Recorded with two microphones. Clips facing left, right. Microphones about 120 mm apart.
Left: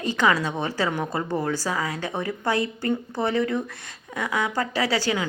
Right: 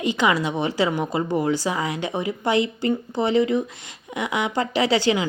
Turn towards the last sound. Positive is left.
turn(degrees=-20)  # may be behind; listen again after turning